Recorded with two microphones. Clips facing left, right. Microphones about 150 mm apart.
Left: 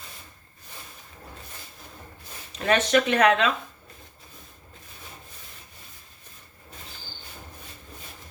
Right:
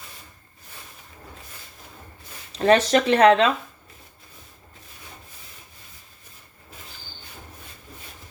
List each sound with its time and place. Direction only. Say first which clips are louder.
2.5 s speech: right 5 dB; 30° right (ahead or behind)